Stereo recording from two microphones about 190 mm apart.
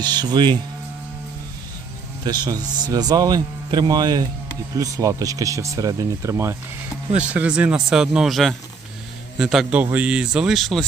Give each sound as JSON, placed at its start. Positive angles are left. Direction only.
{"t": 0.0, "sound": "a man's voice", "side_deg": -20}
{"t": 2.2, "sound": "a man's voice", "side_deg": -20}